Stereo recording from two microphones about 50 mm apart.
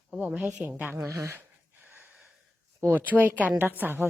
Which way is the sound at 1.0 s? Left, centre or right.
Right.